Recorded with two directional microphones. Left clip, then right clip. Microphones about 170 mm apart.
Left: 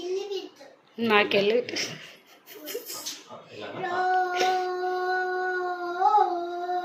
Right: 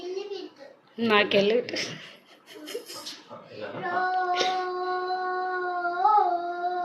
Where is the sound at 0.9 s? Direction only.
Centre (ahead or behind).